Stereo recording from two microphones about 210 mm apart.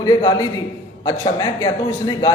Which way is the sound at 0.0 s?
20° left (ahead or behind).